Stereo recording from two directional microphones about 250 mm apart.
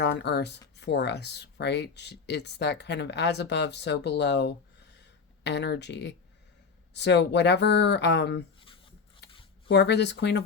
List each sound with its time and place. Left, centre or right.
0.0 s speech: left
9.6 s speech: left